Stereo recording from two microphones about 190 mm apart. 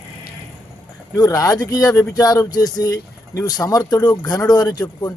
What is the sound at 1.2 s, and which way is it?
Speech, 20° left (ahead or behind).